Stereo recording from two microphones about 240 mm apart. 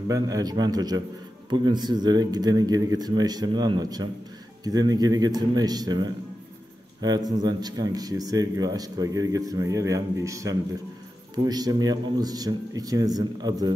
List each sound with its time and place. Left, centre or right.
0.1 s speech: centre